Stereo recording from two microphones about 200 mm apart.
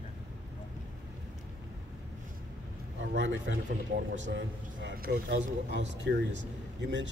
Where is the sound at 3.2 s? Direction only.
65° right (ahead or behind).